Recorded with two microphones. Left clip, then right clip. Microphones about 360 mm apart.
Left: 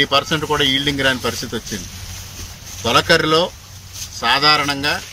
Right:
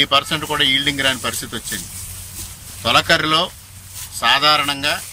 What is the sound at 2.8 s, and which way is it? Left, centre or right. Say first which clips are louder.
Speech: left 1 dB; centre.